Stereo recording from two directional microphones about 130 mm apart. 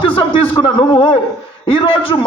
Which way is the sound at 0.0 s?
40° left (ahead or behind).